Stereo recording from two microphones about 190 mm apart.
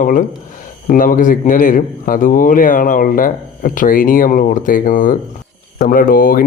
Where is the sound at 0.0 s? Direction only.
45° left (ahead or behind).